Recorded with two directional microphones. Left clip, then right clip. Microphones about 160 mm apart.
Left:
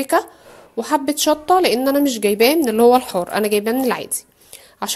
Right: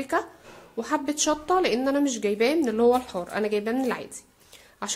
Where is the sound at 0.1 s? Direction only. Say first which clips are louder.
Left 9 dB; 30° left (ahead or behind).